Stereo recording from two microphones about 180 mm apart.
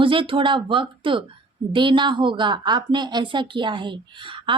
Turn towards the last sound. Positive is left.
turn(degrees=-25)  # may be behind; listen again after turning